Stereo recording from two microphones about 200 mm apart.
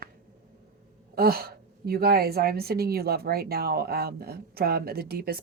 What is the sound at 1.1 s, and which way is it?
A woman's voice, 50° right (ahead or behind).